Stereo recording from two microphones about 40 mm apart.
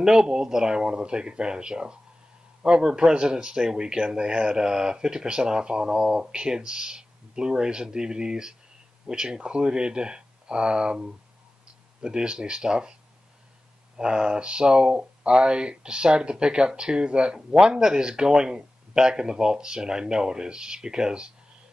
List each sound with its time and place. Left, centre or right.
0.0 s speech: centre
13.9 s speech: right